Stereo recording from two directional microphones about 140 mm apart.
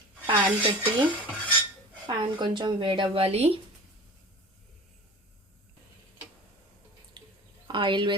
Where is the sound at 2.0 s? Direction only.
35° right (ahead or behind).